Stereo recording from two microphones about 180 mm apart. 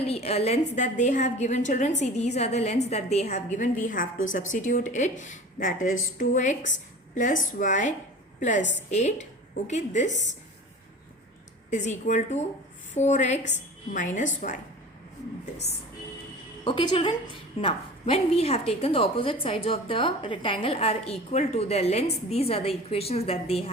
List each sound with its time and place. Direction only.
0.0 s a woman's voice: 35° left (ahead or behind)
11.7 s a woman's voice: 40° left (ahead or behind)
16.6 s a woman's voice: 25° left (ahead or behind)